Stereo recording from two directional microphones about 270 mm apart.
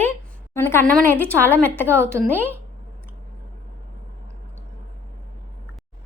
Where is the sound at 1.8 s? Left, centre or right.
Centre.